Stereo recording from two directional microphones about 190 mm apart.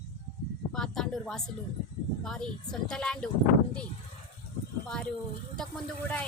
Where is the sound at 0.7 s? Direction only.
5° left (ahead or behind).